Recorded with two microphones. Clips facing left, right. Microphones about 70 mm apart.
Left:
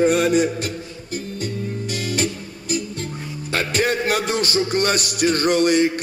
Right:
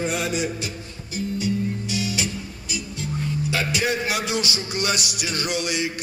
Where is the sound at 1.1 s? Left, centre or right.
Left.